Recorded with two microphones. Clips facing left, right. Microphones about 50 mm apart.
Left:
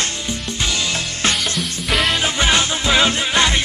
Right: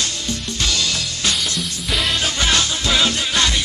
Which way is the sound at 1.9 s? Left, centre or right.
Centre.